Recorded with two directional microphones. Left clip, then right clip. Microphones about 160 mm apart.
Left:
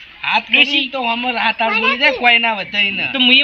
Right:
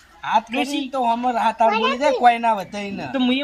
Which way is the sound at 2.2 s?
10° right (ahead or behind).